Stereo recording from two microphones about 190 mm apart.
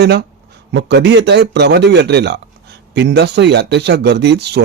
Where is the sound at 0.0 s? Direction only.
60° right (ahead or behind).